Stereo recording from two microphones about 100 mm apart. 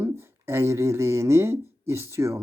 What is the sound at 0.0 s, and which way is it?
Speech, 25° right (ahead or behind).